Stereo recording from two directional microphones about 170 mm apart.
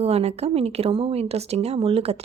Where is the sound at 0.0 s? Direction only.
35° right (ahead or behind).